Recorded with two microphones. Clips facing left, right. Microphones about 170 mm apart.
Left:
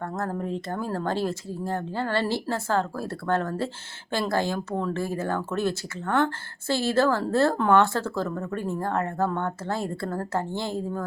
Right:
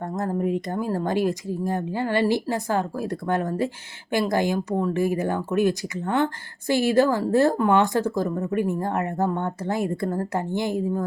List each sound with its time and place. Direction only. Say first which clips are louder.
0.0 s speech: right 4 dB; 15° right (ahead or behind)